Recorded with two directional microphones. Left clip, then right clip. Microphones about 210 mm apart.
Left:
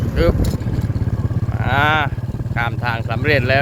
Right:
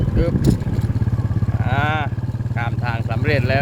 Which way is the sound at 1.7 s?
35° left (ahead or behind).